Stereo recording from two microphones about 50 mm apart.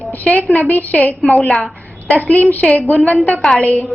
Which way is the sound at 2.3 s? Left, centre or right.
Left.